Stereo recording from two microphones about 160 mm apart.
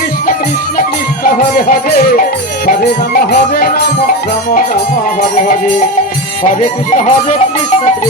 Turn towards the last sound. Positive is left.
turn(degrees=50)  # may be behind; listen again after turning